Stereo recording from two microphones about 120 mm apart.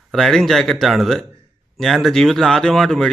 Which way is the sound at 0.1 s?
5° left (ahead or behind).